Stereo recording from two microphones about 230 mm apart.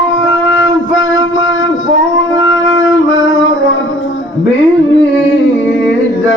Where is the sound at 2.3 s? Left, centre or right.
Left.